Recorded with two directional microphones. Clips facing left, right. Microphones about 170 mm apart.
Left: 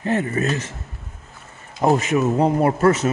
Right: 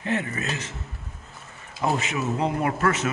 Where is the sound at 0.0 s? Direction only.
40° left (ahead or behind).